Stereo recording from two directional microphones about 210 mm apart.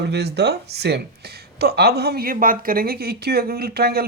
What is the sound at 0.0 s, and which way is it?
Speech, 50° right (ahead or behind).